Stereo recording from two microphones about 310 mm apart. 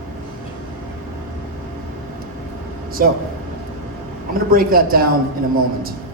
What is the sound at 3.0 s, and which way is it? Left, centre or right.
Speech, right.